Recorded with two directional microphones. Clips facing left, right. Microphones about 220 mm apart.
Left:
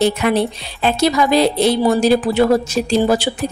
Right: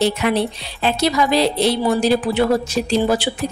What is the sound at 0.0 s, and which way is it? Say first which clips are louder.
A woman's voice: left 2 dB; 50° left (ahead or behind).